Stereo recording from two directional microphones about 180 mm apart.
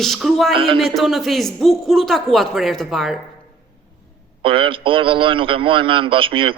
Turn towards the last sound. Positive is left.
turn(degrees=-30)  # may be behind; listen again after turning